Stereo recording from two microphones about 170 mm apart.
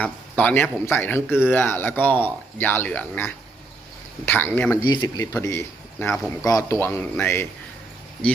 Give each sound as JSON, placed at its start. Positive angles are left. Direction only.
{"t": 0.0, "sound": "speech", "side_deg": 10}
{"t": 4.8, "sound": "speech", "side_deg": 25}